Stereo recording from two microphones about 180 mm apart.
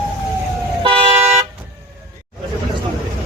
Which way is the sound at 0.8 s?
30° right (ahead or behind).